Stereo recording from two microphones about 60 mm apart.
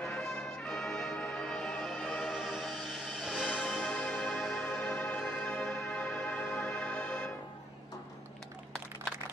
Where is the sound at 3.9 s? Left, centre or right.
Centre.